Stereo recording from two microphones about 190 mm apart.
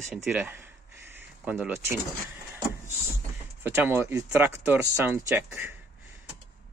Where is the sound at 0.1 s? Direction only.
5° right (ahead or behind).